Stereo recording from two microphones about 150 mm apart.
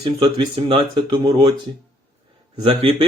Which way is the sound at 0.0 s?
30° right (ahead or behind).